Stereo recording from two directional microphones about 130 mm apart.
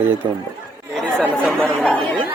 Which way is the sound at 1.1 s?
10° left (ahead or behind).